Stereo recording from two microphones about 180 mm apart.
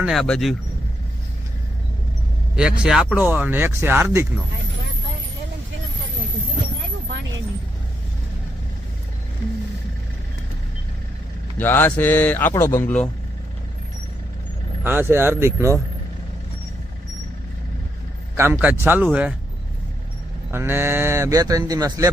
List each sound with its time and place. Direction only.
0.0 s speech: centre (ahead or behind)
2.6 s speech: 5° right (ahead or behind)
11.5 s speech: 10° left (ahead or behind)
14.8 s speech: 10° right (ahead or behind)
18.3 s speech: 15° right (ahead or behind)
20.5 s speech: 10° right (ahead or behind)